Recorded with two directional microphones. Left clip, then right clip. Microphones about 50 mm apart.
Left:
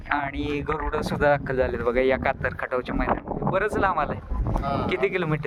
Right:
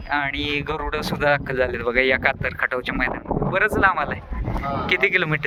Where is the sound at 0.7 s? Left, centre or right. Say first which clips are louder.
Right 1 dB; left.